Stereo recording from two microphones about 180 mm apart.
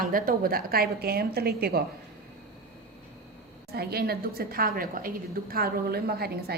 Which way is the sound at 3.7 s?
60° right (ahead or behind).